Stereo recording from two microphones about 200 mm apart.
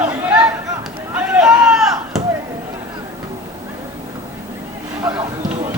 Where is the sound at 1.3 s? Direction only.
5° right (ahead or behind).